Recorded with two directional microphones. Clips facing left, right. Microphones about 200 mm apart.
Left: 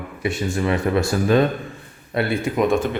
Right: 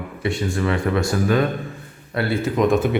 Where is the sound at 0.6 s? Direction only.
20° left (ahead or behind).